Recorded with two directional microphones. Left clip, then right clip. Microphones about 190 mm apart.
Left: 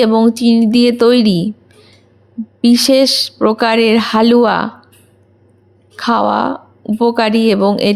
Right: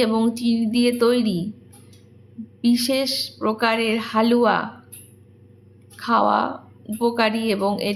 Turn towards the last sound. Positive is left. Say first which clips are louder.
# left 10 dB
turn(degrees=40)  # may be behind; listen again after turning